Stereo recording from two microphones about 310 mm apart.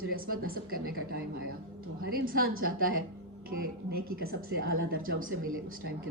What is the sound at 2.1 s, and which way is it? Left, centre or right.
A woman's voice, right.